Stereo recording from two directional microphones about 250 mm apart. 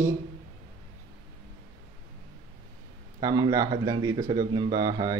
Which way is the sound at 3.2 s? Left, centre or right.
Centre.